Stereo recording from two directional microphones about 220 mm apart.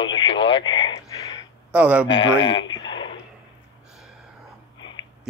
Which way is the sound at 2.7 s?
20° left (ahead or behind).